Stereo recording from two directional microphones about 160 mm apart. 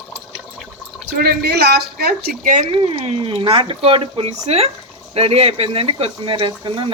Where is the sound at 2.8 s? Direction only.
40° right (ahead or behind).